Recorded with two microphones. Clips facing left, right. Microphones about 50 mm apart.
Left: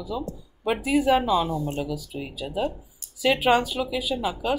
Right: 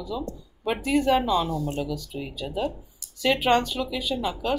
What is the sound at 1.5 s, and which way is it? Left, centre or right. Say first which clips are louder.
Speech: even; centre.